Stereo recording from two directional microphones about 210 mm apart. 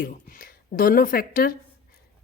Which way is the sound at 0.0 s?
40° left (ahead or behind).